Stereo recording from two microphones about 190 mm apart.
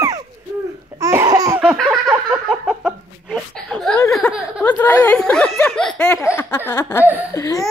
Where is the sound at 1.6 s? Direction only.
Centre (ahead or behind).